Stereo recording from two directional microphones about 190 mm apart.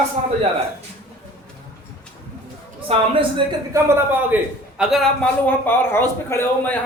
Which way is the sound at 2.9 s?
30° right (ahead or behind).